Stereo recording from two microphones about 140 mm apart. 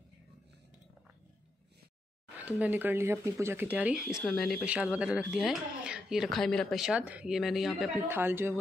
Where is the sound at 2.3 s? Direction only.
10° right (ahead or behind).